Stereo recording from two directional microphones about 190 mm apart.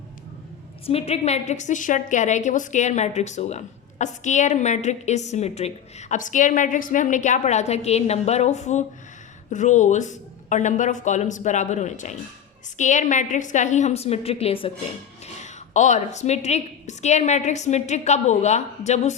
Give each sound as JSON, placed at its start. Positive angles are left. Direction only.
{"t": 0.9, "sound": "a woman's voice", "side_deg": 30}
{"t": 15.7, "sound": "a woman's voice", "side_deg": 40}